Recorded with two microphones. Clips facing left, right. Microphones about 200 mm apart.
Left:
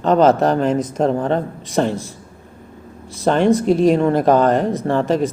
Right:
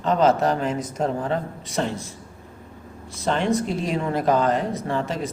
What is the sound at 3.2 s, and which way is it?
Speech, 55° left (ahead or behind).